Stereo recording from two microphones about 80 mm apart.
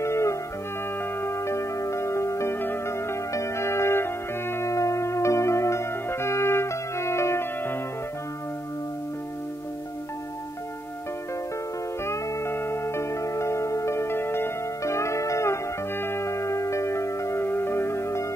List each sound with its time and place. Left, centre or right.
0.0 s music: left
12.1 s music: left